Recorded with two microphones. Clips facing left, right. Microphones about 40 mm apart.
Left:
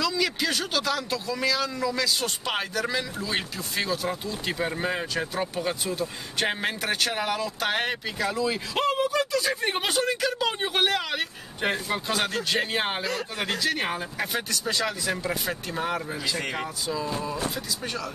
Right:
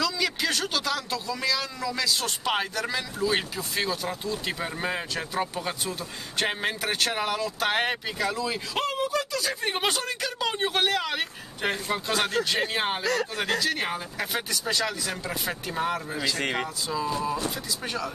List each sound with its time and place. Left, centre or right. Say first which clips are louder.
0.0 s a man's voice: left 1 dB; centre
8.8 s a sound: left 4 dB; centre
9.3 s a man's voice: left 3 dB; centre
16.3 s speech: right 3 dB; right
17.8 s a man's voice: right 3 dB; centre